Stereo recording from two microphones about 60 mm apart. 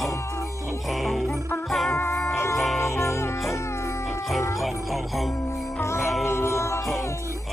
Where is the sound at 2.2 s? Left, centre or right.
Left.